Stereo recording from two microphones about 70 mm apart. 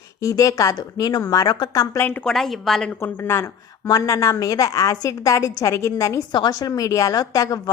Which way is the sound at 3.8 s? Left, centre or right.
Left.